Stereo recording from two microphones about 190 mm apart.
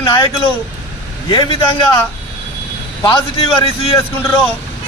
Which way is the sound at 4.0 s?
10° left (ahead or behind).